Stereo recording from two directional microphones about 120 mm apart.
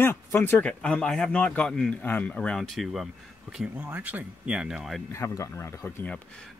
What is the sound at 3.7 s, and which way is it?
Speech, 15° right (ahead or behind).